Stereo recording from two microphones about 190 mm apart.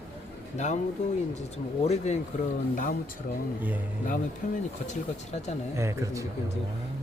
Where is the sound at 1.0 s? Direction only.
40° left (ahead or behind).